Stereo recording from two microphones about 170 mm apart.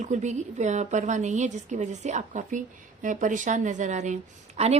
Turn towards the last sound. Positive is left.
turn(degrees=-40)  # may be behind; listen again after turning